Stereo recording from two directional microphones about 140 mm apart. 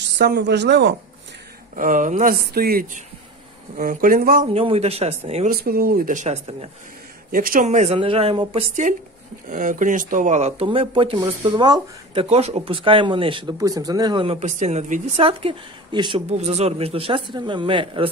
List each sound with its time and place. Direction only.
1.8 s speech: 70° right (ahead or behind); by 4.5 s 90° right
4.6 s speech: 45° right (ahead or behind)
5.5 s speech: 90° right
6.2 s speech: 45° right (ahead or behind)
7.2 s a man's voice: 90° right
7.6 s speech: 55° right (ahead or behind)
8.8 s speech: 65° right (ahead or behind); by 12.3 s 35° right (ahead or behind)
12.3 s speech: 50° right (ahead or behind)
13.6 s speech: 25° right (ahead or behind)
14.4 s speech: 60° right (ahead or behind); by 16.2 s 35° right (ahead or behind)
16.3 s speech: 50° right (ahead or behind)